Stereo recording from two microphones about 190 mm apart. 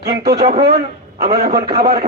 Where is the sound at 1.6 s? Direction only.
30° right (ahead or behind).